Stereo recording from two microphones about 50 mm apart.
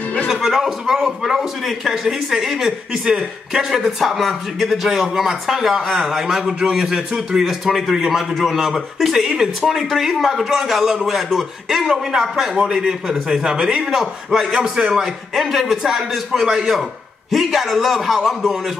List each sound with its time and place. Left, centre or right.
0.3 s a man's voice: centre
15.3 s a man's voice: centre